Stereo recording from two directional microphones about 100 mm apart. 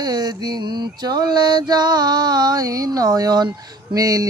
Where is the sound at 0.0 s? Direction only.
40° right (ahead or behind).